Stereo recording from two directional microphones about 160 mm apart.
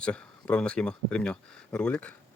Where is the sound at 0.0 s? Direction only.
5° left (ahead or behind).